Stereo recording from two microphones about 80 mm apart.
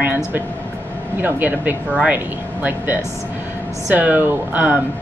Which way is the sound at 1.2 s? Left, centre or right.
Right.